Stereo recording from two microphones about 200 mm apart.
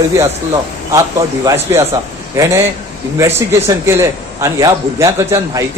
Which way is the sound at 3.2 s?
10° right (ahead or behind).